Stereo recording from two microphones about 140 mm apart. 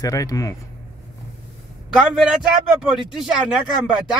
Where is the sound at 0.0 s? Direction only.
25° left (ahead or behind).